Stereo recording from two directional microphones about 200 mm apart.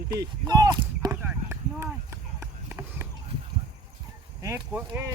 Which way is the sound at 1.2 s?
15° right (ahead or behind).